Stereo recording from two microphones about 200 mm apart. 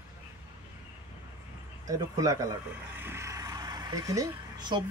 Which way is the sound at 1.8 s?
15° right (ahead or behind).